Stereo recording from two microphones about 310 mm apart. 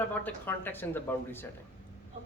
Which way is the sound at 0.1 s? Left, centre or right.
Centre.